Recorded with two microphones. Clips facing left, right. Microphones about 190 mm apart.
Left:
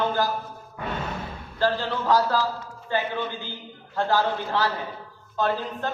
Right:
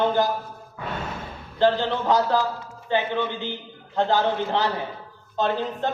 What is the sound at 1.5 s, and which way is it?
Speech, 20° right (ahead or behind).